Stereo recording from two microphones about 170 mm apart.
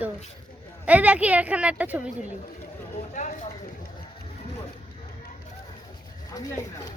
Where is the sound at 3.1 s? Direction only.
45° left (ahead or behind).